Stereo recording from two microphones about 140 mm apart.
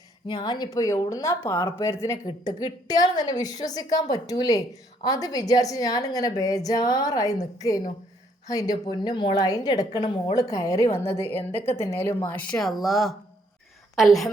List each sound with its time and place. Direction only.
0.3 s a woman's voice: 35° left (ahead or behind); by 14.3 s centre (ahead or behind)